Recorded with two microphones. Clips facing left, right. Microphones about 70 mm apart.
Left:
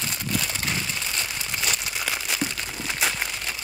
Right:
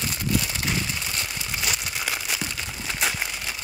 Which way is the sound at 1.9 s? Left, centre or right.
Centre.